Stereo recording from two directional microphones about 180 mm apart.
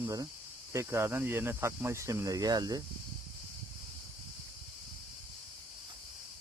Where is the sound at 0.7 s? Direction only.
15° right (ahead or behind).